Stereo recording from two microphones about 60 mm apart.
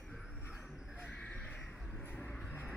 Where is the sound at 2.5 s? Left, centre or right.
Left.